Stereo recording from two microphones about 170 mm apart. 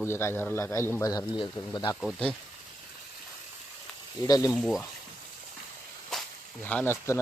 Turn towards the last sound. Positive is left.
turn(degrees=15)  # may be behind; listen again after turning